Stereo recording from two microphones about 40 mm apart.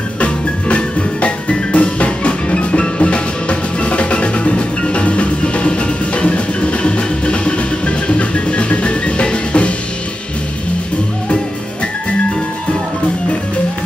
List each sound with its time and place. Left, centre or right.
0.2 s music: left